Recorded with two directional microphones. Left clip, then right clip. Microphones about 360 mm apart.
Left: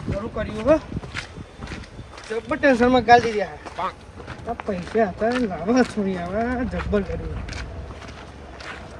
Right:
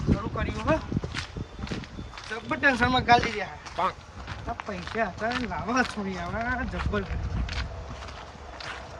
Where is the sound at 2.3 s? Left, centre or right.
Centre.